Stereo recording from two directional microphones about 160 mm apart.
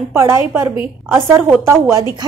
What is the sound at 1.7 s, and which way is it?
Speech, 20° right (ahead or behind).